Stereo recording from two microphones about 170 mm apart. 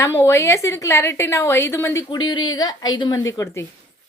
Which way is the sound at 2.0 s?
25° left (ahead or behind).